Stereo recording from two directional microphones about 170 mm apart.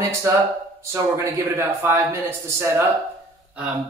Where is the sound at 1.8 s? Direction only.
15° right (ahead or behind).